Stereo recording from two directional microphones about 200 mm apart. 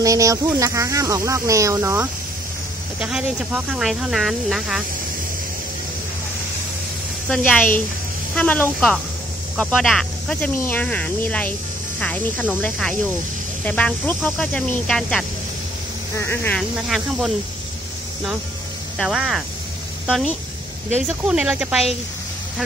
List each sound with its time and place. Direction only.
0.0 s speech: 15° right (ahead or behind)
7.2 s speech: 5° left (ahead or behind)
16.8 s speech: centre (ahead or behind)
18.9 s speech: centre (ahead or behind)